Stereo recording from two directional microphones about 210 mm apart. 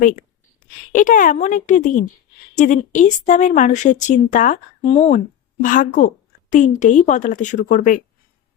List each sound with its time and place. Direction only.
0.9 s speech: 40° left (ahead or behind)